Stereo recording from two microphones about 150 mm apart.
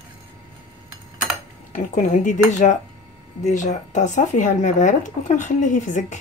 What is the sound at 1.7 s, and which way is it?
Speech, 60° left (ahead or behind).